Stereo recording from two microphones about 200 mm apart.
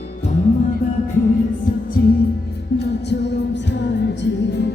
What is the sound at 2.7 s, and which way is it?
Music, 60° left (ahead or behind).